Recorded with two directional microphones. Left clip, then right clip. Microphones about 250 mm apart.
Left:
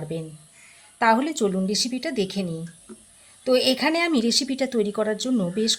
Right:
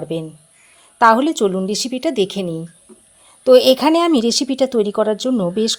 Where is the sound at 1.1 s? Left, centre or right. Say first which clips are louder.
Right 7 dB; right.